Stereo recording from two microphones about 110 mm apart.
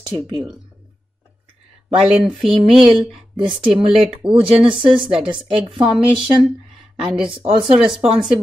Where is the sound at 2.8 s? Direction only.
50° right (ahead or behind).